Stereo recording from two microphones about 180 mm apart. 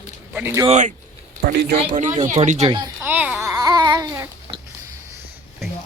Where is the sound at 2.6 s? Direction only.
25° right (ahead or behind).